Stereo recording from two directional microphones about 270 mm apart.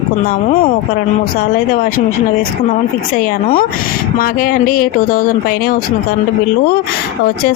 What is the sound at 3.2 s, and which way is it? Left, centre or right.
Speech, left.